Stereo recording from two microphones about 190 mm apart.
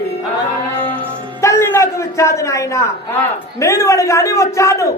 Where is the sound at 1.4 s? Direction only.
15° left (ahead or behind).